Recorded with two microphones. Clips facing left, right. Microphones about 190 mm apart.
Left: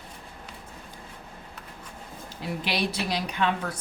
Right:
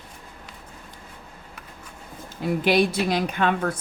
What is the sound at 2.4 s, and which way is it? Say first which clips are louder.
A woman's voice: right 9 dB; 50° right (ahead or behind).